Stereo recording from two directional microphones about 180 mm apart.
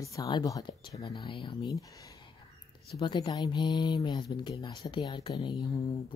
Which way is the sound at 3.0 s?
25° left (ahead or behind).